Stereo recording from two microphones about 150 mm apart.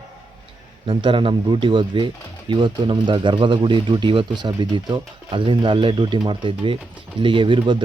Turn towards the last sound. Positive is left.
turn(degrees=-35)  # may be behind; listen again after turning